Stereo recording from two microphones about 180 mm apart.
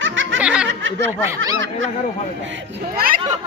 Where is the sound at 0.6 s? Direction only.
90° right.